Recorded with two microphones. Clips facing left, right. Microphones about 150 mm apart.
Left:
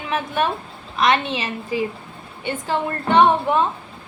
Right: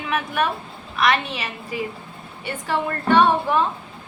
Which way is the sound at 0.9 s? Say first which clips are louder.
Left 2 dB; 25° left (ahead or behind).